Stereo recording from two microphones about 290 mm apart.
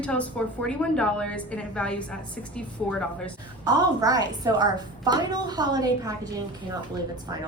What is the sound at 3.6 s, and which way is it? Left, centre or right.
A woman's voice, centre.